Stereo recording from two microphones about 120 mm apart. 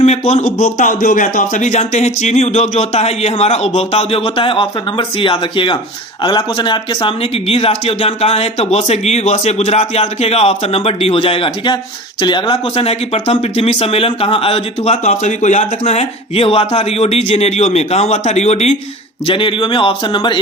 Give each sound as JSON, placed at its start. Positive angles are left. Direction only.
{"t": 0.0, "sound": "speech", "side_deg": 65}
{"t": 12.7, "sound": "speech", "side_deg": 55}
{"t": 15.0, "sound": "speech", "side_deg": 85}
{"t": 19.3, "sound": "speech", "side_deg": 45}